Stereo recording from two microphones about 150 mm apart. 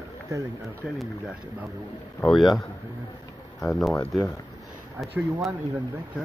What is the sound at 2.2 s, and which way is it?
Speech, centre (ahead or behind).